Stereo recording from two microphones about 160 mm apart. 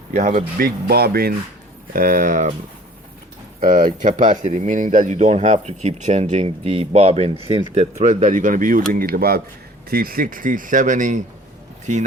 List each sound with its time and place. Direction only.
0.1 s speech: 45° right (ahead or behind)
0.6 s speech: 75° right (ahead or behind)
1.9 s speech: 60° right (ahead or behind)
3.6 s speech: 60° right (ahead or behind)